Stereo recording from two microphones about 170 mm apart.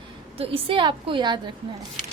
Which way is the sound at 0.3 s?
35° right (ahead or behind).